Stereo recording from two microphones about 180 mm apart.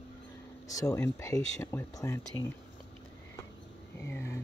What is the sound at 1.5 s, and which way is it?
Music, 15° left (ahead or behind).